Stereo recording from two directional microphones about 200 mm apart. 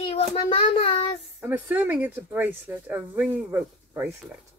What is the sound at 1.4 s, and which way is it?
Speech, 10° right (ahead or behind).